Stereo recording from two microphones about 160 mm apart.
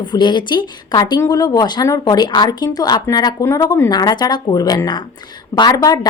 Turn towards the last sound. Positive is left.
turn(degrees=25)  # may be behind; listen again after turning